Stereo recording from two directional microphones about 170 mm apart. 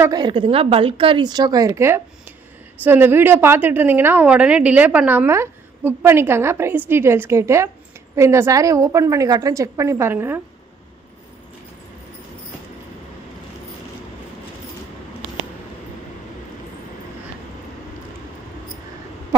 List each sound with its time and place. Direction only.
0.0 s a woman's voice: 25° right (ahead or behind)